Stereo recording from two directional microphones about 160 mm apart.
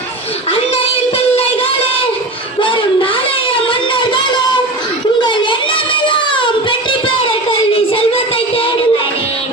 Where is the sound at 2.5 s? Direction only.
30° left (ahead or behind).